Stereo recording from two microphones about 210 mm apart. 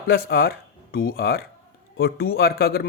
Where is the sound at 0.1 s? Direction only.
45° left (ahead or behind).